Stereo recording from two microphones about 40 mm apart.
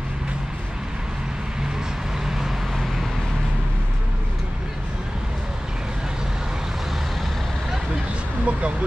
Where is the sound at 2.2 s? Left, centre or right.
Centre.